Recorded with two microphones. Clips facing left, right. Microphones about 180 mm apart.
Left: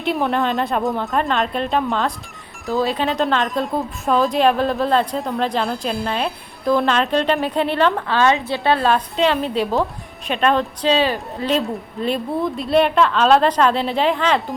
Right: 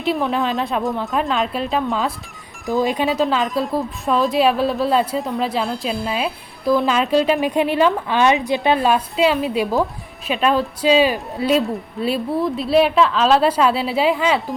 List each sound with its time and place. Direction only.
0.0 s speech: centre (ahead or behind)
2.6 s speech: 15° right (ahead or behind)
3.1 s speech: 5° right (ahead or behind)